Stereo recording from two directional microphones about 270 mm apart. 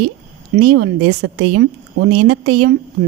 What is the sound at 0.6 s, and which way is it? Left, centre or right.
A woman's voice, right.